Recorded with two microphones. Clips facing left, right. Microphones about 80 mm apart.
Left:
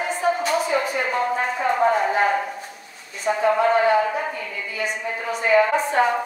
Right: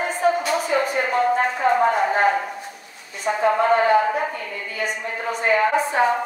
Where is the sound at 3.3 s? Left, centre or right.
Right.